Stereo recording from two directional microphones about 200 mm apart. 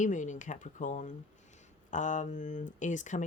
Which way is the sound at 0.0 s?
40° left (ahead or behind).